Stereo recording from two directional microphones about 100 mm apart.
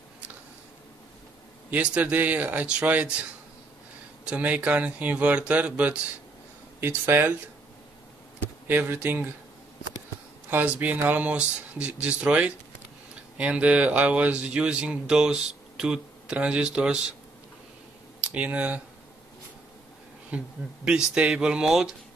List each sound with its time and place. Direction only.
1.7 s speech: 15° right (ahead or behind)
4.3 s speech: 15° right (ahead or behind)
8.6 s speech: 20° right (ahead or behind)
10.5 s speech: 20° right (ahead or behind)
18.2 s speech: 15° right (ahead or behind)
20.2 s speech: 10° right (ahead or behind)